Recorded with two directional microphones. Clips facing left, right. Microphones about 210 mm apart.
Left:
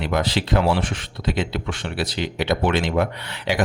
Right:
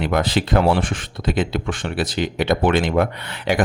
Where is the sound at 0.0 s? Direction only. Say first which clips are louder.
Right 3 dB; 50° right (ahead or behind).